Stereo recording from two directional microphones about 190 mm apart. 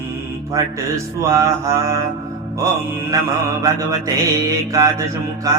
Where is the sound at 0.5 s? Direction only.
15° right (ahead or behind).